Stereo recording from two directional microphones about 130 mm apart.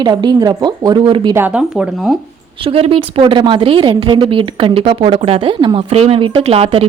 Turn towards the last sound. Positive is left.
turn(degrees=-50)  # may be behind; listen again after turning